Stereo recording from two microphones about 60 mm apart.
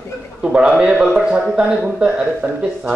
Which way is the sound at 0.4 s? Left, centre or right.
Centre.